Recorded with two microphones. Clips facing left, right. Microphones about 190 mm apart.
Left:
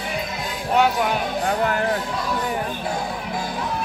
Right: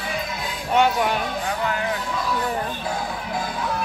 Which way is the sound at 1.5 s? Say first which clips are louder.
Left 5 dB; 50° left (ahead or behind).